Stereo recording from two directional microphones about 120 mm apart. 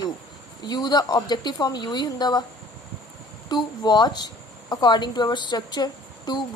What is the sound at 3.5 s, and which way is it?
Speech, 35° left (ahead or behind).